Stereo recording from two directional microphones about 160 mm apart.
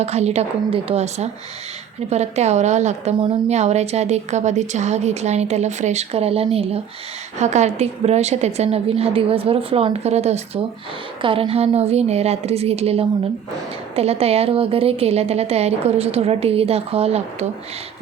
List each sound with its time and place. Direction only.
0.0 s a woman's voice: 45° right (ahead or behind)